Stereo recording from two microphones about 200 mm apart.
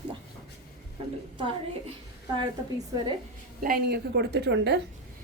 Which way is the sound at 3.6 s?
50° right (ahead or behind).